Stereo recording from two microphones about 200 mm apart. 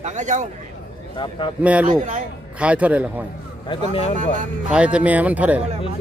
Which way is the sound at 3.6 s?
30° left (ahead or behind).